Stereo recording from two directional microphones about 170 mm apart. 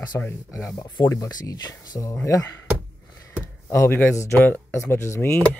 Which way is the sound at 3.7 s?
15° left (ahead or behind).